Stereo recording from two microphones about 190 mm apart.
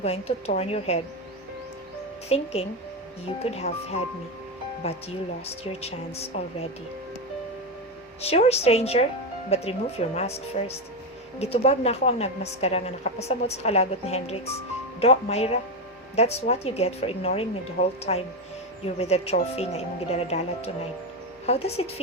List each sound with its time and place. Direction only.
0.0 s a woman's voice: 30° left (ahead or behind)
2.3 s a woman's voice: 35° left (ahead or behind)
8.2 s a woman's voice: 35° left (ahead or behind)